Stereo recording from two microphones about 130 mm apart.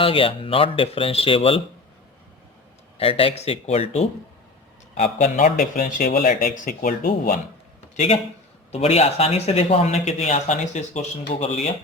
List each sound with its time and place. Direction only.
0.0 s speech: 45° left (ahead or behind)
3.0 s speech: 45° left (ahead or behind)
4.9 s a man's voice: 70° left (ahead or behind); by 7.3 s 90° left
7.9 s speech: 50° left (ahead or behind)